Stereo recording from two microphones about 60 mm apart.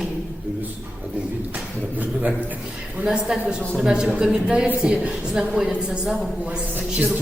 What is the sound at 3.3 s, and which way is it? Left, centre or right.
A woman's voice, centre.